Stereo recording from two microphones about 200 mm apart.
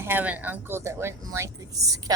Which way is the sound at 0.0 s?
10° right (ahead or behind).